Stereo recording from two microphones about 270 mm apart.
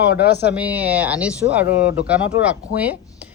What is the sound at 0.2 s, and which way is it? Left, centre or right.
Speech, left.